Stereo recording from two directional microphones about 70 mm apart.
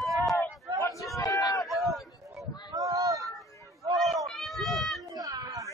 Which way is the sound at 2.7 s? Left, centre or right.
Right.